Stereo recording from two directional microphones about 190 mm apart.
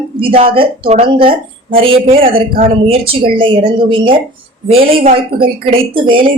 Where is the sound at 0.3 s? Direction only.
30° right (ahead or behind).